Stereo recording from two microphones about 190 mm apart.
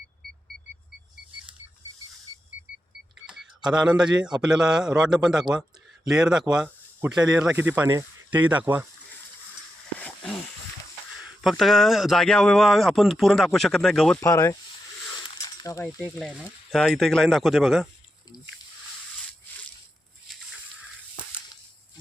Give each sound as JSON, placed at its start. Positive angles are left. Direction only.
{"t": 3.2, "sound": "speech", "side_deg": -5}
{"t": 11.4, "sound": "speech", "side_deg": 0}
{"t": 14.2, "sound": "speech", "side_deg": 15}
{"t": 15.4, "sound": "coin", "side_deg": 15}
{"t": 16.7, "sound": "speech", "side_deg": 0}
{"t": 20.2, "sound": "a sound", "side_deg": 0}